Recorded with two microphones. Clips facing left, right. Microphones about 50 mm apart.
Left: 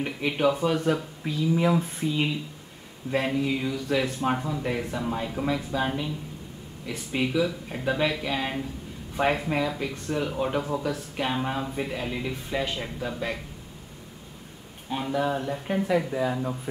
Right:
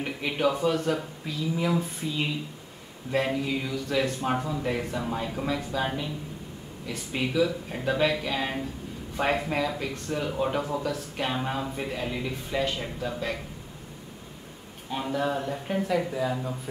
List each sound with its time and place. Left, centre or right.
0.0 s speech: centre
1.2 s speech: centre
14.9 s speech: centre